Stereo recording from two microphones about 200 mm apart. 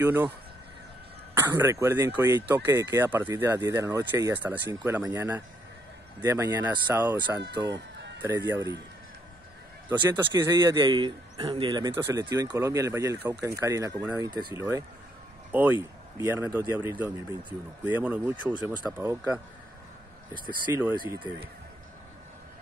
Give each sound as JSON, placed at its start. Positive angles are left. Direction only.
{"t": 0.0, "sound": "speech", "side_deg": -10}
{"t": 1.3, "sound": "speech", "side_deg": -10}
{"t": 7.4, "sound": "speech", "side_deg": -60}
{"t": 8.5, "sound": "speech", "side_deg": -15}
{"t": 9.9, "sound": "speech", "side_deg": -20}
{"t": 20.7, "sound": "speech", "side_deg": -15}